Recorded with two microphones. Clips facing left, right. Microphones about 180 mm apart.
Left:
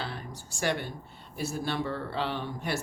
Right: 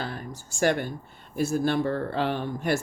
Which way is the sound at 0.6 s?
50° right (ahead or behind).